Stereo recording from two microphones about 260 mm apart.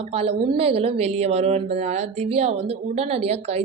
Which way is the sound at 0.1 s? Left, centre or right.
Right.